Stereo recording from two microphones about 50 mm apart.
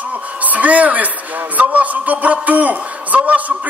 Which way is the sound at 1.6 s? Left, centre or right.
Right.